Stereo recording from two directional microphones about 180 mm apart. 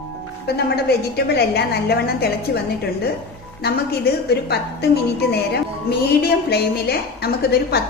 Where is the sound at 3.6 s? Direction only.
60° left (ahead or behind).